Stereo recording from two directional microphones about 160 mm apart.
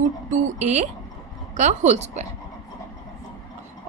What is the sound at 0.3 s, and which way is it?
A woman's voice, 45° right (ahead or behind).